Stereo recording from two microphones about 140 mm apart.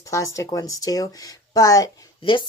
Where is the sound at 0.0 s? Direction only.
25° left (ahead or behind).